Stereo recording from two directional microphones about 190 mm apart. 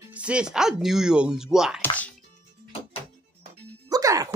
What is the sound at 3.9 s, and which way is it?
Music, 20° right (ahead or behind).